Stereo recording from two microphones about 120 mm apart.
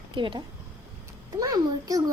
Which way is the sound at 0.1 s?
45° right (ahead or behind).